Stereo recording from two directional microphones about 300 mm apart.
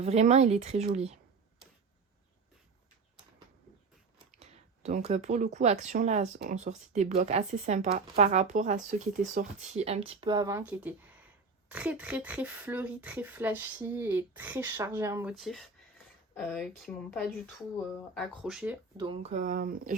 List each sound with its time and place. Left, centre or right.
0.0 s speech: right
4.4 s a sound: right
5.5 s speech: right; by 19.0 s centre
19.0 s speech: centre